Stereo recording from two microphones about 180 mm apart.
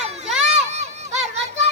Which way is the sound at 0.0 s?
35° right (ahead or behind).